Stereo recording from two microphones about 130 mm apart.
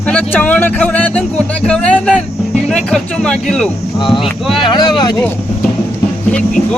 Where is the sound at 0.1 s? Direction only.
10° left (ahead or behind).